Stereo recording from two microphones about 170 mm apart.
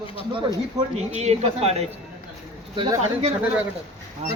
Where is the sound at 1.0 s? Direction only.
40° right (ahead or behind).